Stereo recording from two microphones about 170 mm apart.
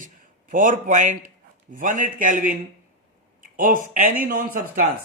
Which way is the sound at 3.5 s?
55° right (ahead or behind).